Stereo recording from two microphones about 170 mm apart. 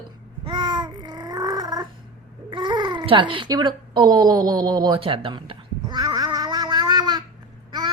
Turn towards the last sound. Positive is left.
turn(degrees=-25)  # may be behind; listen again after turning